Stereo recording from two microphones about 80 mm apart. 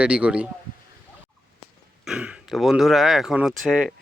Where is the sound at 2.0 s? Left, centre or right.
Centre.